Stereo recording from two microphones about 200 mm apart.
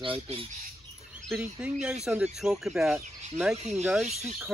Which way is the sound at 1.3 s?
5° right (ahead or behind).